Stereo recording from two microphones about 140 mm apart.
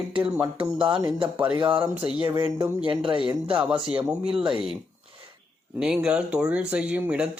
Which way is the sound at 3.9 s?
40° right (ahead or behind).